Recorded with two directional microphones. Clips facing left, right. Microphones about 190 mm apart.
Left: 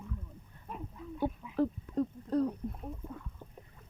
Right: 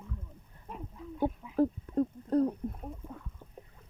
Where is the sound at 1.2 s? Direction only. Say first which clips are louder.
Right 3 dB; 45° right (ahead or behind).